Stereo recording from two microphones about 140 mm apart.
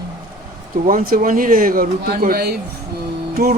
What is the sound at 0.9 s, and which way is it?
Speech, 80° right.